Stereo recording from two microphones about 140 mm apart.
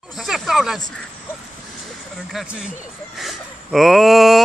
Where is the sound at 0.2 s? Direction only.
5° right (ahead or behind).